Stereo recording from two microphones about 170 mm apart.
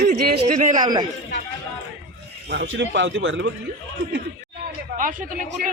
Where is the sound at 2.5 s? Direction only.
90° right.